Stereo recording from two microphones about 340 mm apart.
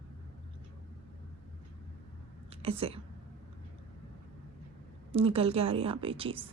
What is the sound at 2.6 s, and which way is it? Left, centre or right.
Speech, centre.